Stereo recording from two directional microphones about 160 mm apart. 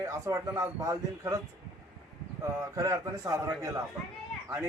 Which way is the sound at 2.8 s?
20° right (ahead or behind).